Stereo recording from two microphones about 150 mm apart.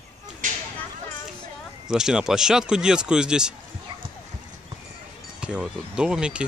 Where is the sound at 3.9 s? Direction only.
30° right (ahead or behind).